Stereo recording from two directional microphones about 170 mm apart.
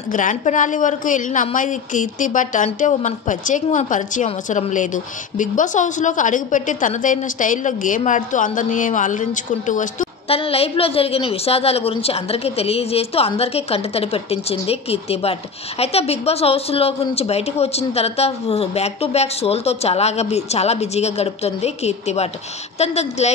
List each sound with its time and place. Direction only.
0.1 s a woman's voice: 50° left (ahead or behind)